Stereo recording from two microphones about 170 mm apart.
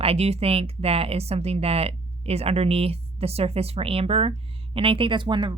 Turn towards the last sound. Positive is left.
turn(degrees=-25)  # may be behind; listen again after turning